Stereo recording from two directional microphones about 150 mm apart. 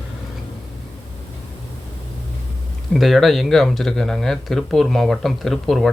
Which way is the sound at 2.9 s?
Centre (ahead or behind).